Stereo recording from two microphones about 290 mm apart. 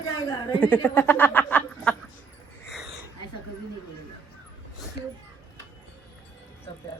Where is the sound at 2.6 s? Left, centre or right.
Centre.